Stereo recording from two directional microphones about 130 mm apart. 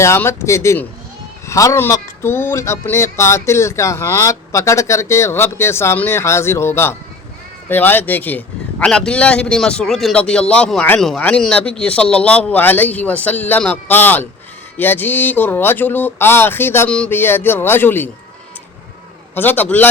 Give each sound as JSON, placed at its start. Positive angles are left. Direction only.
{"t": 0.0, "sound": "a man's voice", "side_deg": 20}
{"t": 19.3, "sound": "a man's voice", "side_deg": 15}